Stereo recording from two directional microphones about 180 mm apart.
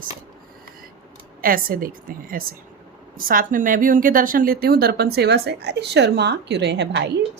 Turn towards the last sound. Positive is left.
turn(degrees=-70)  # may be behind; listen again after turning